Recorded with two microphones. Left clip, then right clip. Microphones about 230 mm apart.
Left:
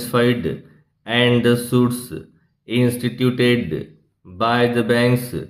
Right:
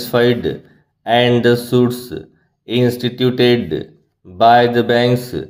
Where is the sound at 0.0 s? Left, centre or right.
Centre.